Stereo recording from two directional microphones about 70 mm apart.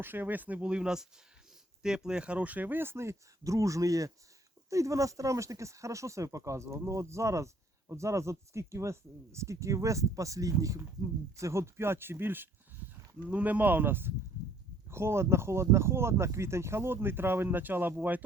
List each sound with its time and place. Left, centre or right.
0.0 s speech: right
13.2 s speech: right